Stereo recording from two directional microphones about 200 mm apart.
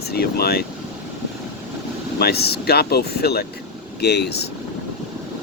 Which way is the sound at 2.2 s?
50° left (ahead or behind).